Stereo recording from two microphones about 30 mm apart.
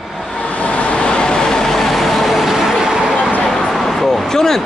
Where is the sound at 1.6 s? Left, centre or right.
Centre.